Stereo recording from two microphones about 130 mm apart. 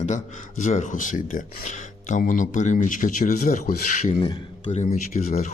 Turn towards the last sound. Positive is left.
turn(degrees=65)  # may be behind; listen again after turning